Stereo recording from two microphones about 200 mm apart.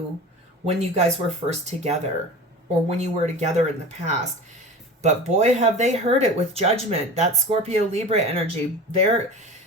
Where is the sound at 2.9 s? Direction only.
35° right (ahead or behind).